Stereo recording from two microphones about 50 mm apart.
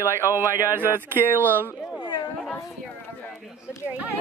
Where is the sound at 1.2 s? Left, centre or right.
Left.